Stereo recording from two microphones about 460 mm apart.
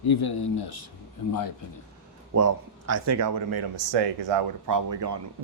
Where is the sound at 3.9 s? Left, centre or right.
Right.